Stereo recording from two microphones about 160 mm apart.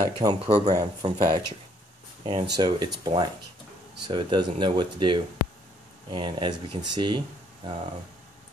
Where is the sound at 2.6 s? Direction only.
25° right (ahead or behind).